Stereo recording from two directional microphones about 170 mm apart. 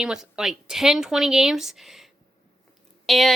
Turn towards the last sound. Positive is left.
turn(degrees=0)  # may be behind; listen again after turning